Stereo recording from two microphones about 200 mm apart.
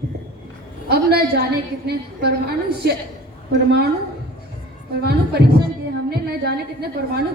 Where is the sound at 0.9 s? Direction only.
50° right (ahead or behind).